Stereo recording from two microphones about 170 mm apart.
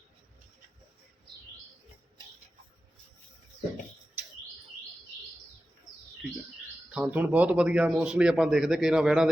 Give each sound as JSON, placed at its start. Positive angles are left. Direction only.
{"t": 6.9, "sound": "speech", "side_deg": -10}